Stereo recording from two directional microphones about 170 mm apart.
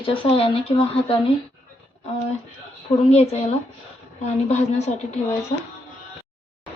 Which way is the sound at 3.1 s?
40° left (ahead or behind).